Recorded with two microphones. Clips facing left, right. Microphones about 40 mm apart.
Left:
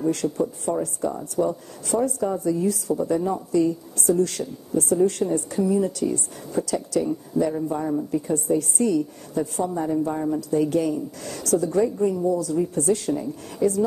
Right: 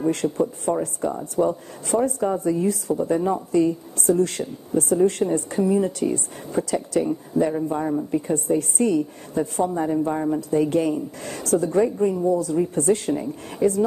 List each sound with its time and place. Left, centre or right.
0.0 s speech: right
0.7 s speech: right
1.3 s speech: right